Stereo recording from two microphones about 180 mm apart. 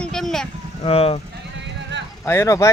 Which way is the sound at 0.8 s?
35° left (ahead or behind).